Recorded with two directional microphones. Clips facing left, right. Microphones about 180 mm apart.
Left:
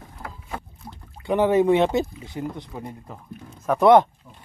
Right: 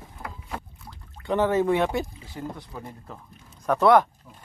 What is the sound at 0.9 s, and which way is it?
Speech, 15° left (ahead or behind).